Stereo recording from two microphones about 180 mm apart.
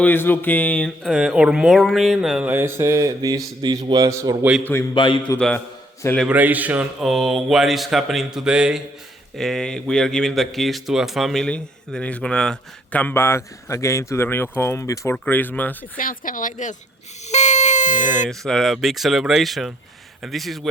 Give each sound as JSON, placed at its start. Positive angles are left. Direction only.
{"t": 0.0, "sound": "a man's voice", "side_deg": 10}
{"t": 4.6, "sound": "a man's voice", "side_deg": 15}
{"t": 4.9, "sound": "a man's voice", "side_deg": 25}
{"t": 5.4, "sound": "a man's voice", "side_deg": 5}
{"t": 6.2, "sound": "speech", "side_deg": -10}
{"t": 16.0, "sound": "a woman's voice", "side_deg": 50}
{"t": 17.2, "sound": "buzzer", "side_deg": 40}
{"t": 18.3, "sound": "speech", "side_deg": 0}